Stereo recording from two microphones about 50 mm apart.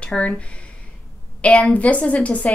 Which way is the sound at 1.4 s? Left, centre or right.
Left.